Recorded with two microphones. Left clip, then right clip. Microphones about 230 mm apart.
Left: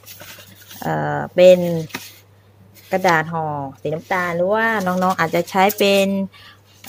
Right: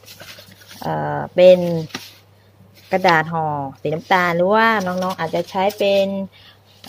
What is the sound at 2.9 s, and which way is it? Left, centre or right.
Speech, centre.